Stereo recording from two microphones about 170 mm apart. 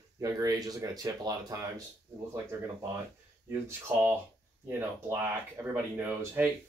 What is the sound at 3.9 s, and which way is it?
Speech, 10° right (ahead or behind).